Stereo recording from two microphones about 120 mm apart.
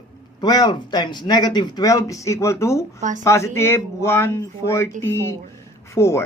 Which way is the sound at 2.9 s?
90° right.